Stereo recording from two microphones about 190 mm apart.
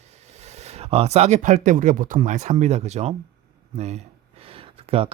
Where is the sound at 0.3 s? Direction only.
35° right (ahead or behind).